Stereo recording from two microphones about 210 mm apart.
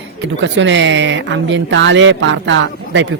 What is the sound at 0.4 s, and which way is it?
Speech, 60° right (ahead or behind).